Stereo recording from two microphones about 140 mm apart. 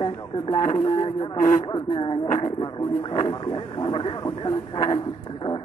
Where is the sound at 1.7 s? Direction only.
35° left (ahead or behind).